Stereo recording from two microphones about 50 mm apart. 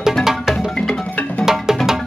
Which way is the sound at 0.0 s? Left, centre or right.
Centre.